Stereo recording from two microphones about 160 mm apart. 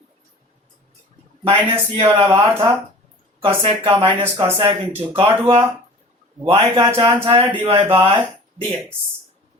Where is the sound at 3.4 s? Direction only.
35° right (ahead or behind).